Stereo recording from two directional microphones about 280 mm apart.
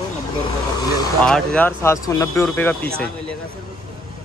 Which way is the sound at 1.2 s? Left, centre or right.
Centre.